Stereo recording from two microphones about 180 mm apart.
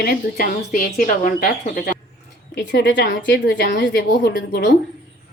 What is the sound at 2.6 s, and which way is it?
Speech, 85° left.